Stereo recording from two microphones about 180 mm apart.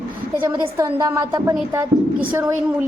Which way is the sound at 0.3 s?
15° right (ahead or behind).